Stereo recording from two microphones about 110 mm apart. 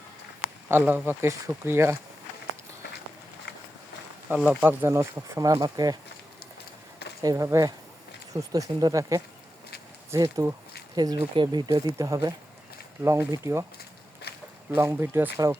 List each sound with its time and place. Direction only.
0.7 s speech: 20° right (ahead or behind)
4.4 s speech: 15° right (ahead or behind); by 6.0 s 35° right (ahead or behind)
7.2 s speech: 30° right (ahead or behind)
10.9 s speech: 40° right (ahead or behind)
14.8 s speech: 20° right (ahead or behind)